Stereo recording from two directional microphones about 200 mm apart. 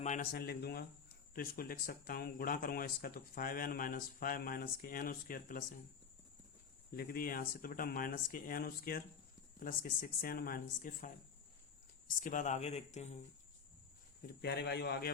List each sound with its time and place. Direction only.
0.0 s speech: 40° left (ahead or behind)
6.9 s speech: 50° left (ahead or behind)
14.4 s speech: 55° left (ahead or behind)